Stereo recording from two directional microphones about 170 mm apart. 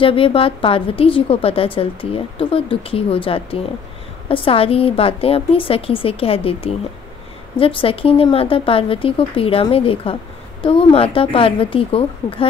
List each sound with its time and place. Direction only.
0.0 s a woman's voice: 30° left (ahead or behind)